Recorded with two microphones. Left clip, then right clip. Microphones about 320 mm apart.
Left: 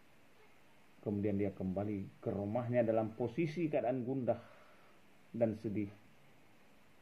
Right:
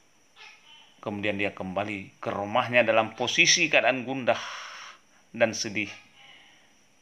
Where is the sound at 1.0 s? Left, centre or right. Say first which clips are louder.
Right 9 dB; right.